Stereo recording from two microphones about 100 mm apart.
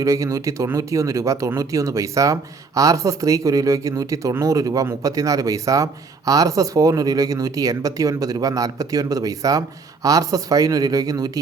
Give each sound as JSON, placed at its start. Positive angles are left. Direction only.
{"t": 0.0, "sound": "speech", "side_deg": -35}